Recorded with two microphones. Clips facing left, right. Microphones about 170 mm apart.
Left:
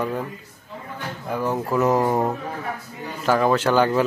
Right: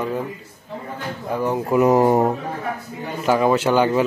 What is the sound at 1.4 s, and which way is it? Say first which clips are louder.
Speech: right 4 dB; 15° right (ahead or behind).